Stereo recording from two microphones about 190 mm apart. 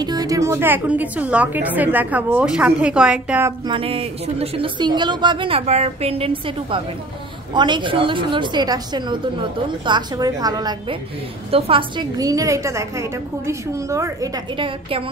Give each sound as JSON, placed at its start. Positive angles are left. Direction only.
{"t": 0.0, "sound": "a woman's voice", "side_deg": -20}
{"t": 3.6, "sound": "a woman's voice", "side_deg": -30}